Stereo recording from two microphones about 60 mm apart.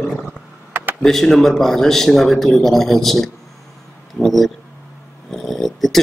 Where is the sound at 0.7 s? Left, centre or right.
Right.